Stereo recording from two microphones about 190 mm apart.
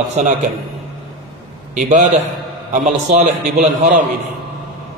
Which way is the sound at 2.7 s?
40° right (ahead or behind).